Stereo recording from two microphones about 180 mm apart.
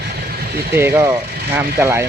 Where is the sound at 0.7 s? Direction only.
15° right (ahead or behind).